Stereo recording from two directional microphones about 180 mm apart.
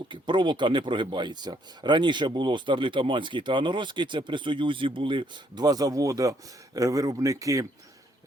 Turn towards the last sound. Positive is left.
turn(degrees=-20)  # may be behind; listen again after turning